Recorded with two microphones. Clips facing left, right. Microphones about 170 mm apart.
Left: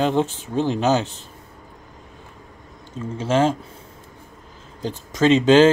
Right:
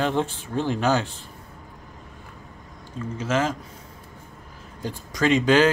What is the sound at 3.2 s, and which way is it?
Speech, 30° left (ahead or behind).